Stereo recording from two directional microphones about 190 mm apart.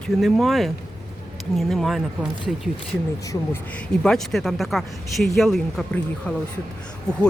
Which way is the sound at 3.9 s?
5° left (ahead or behind).